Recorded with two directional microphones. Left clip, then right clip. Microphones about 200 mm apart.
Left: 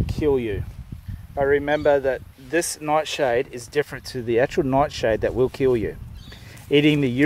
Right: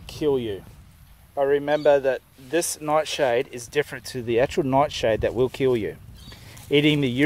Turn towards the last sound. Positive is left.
turn(degrees=-10)  # may be behind; listen again after turning